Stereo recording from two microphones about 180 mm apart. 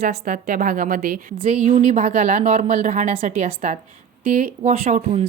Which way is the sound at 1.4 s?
40° right (ahead or behind).